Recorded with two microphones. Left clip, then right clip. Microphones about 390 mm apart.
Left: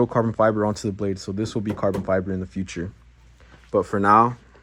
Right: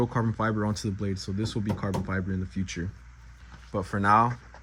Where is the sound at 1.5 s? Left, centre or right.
Left.